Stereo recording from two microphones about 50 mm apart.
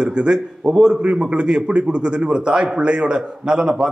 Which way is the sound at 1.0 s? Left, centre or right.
Right.